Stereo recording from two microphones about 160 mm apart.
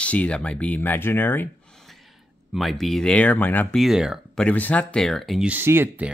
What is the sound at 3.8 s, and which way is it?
Speech, 5° right (ahead or behind).